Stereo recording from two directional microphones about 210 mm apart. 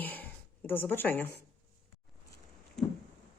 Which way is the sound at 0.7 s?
10° left (ahead or behind).